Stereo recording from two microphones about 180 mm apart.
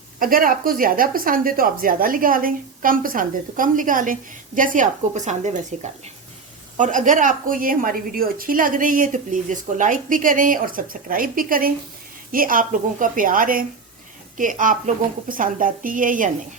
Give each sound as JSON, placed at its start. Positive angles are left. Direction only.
{"t": 0.2, "sound": "a woman's voice", "side_deg": -50}